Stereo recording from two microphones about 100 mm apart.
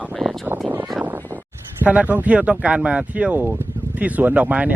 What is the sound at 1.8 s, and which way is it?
Speech, 15° right (ahead or behind).